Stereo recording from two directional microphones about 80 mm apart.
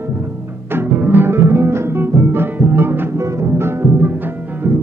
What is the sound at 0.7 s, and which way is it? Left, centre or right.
Music, right.